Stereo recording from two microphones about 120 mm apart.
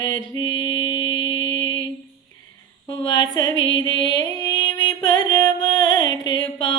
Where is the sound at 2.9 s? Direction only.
35° left (ahead or behind).